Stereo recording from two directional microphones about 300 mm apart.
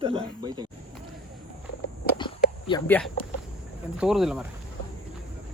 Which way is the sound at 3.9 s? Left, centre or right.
Centre.